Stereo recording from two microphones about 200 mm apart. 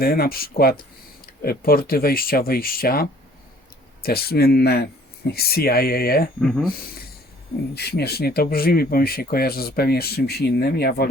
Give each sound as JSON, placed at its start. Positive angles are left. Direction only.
{"t": 0.0, "sound": "speech", "side_deg": 50}
{"t": 7.8, "sound": "speech", "side_deg": 55}